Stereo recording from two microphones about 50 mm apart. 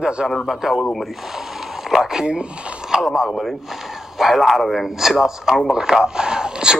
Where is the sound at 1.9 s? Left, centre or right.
Centre.